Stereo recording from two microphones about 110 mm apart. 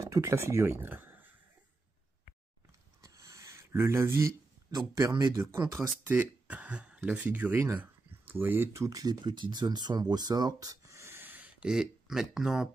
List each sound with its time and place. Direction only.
0.0 s speech: 25° right (ahead or behind)
3.0 s a sound: 30° right (ahead or behind)
5.3 s speech: 35° right (ahead or behind)
6.0 s speech: 15° right (ahead or behind)